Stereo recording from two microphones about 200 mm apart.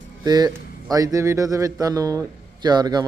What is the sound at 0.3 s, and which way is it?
A man's voice, 20° right (ahead or behind).